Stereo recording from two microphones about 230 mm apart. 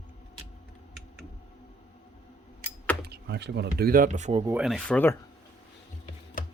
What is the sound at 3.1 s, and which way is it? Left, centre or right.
Speech, right.